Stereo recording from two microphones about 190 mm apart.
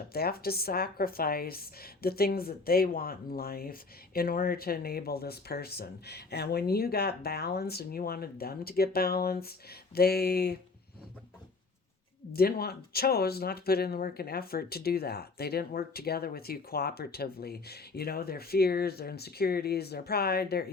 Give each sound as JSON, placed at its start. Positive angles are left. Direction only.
{"t": 0.1, "sound": "a woman's voice", "side_deg": 55}
{"t": 12.3, "sound": "speech", "side_deg": 55}